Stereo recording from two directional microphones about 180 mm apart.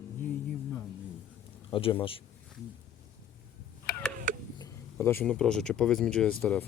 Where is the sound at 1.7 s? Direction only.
30° left (ahead or behind).